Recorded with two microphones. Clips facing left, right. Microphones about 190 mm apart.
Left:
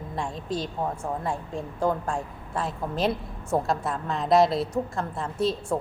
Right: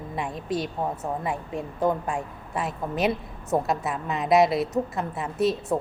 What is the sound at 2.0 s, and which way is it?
A woman's voice, 5° right (ahead or behind).